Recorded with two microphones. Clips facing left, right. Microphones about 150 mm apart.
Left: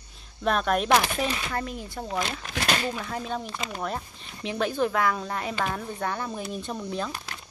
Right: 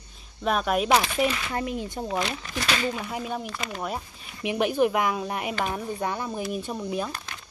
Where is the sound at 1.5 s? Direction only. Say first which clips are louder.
Right 3 dB; 20° right (ahead or behind).